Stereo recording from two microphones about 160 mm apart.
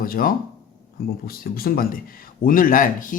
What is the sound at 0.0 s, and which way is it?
Speech, 65° left (ahead or behind).